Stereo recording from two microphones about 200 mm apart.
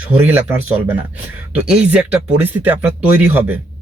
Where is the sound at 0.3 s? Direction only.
10° right (ahead or behind).